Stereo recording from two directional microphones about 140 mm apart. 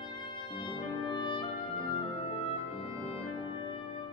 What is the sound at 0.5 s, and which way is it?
Clarinet, 35° left (ahead or behind).